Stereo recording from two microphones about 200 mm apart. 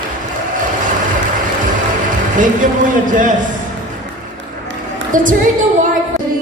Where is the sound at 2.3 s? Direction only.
40° right (ahead or behind).